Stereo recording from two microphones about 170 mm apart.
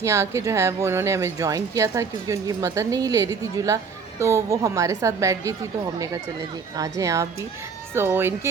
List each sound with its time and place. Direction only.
0.0 s a woman's voice: 15° right (ahead or behind)
6.7 s a woman's voice: 20° right (ahead or behind)